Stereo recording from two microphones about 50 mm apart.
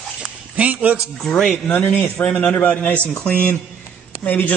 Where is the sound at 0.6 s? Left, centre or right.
Right.